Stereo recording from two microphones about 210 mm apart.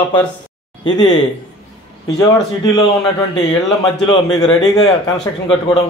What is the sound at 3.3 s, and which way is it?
Speech, 30° left (ahead or behind).